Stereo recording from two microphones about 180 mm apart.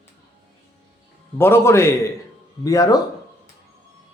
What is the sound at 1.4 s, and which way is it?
Speech, 15° left (ahead or behind).